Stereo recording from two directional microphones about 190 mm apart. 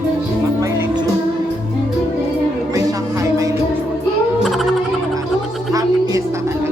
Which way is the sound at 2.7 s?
15° right (ahead or behind).